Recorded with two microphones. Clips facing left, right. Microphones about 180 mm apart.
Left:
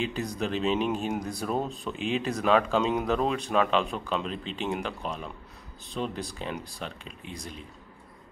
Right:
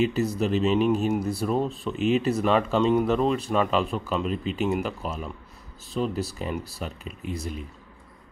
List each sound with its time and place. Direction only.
0.0 s speech: 5° right (ahead or behind)